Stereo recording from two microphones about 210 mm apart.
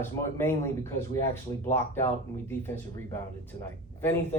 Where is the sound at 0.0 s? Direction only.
10° left (ahead or behind).